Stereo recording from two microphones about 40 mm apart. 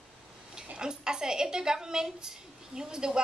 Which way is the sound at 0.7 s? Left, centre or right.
Centre.